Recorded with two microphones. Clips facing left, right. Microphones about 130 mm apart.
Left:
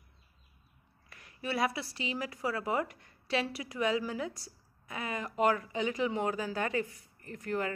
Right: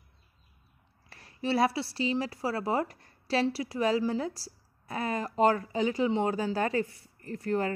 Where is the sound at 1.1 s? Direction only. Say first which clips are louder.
Right 6 dB; 30° right (ahead or behind).